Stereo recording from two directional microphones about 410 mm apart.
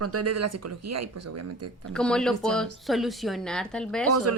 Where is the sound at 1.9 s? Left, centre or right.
Centre.